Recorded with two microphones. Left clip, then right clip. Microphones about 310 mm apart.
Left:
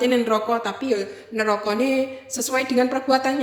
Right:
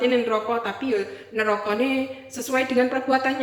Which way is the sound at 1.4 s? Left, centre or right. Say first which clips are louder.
Left 1 dB; left.